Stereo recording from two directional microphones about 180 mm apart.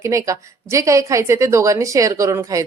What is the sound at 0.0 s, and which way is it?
A woman's voice, 15° right (ahead or behind).